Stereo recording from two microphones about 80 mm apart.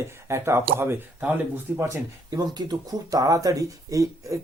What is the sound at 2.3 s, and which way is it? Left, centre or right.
A man's voice, right.